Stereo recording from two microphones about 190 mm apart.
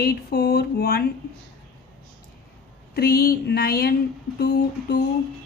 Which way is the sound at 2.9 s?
55° left (ahead or behind).